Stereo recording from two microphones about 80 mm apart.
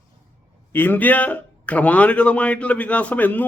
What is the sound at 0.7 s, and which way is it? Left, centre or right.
A man's voice, left.